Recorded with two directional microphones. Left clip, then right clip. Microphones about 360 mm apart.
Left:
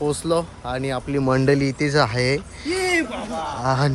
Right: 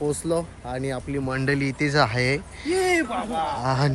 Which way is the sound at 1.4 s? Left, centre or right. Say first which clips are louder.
Left 5 dB; centre.